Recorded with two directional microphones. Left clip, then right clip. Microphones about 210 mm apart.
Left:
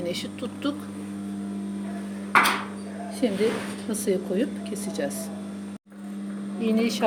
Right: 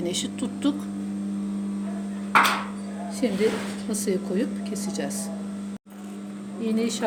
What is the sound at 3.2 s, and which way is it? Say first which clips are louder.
Speech: even; 15° right (ahead or behind).